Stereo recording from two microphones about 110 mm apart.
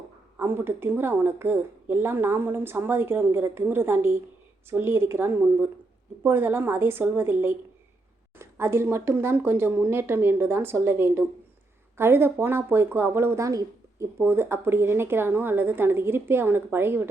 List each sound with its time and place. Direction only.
0.3 s speech: 20° right (ahead or behind)
14.2 s speech: 20° right (ahead or behind)